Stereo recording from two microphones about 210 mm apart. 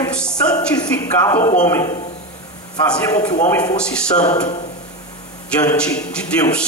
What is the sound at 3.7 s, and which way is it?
Speech, 5° left (ahead or behind).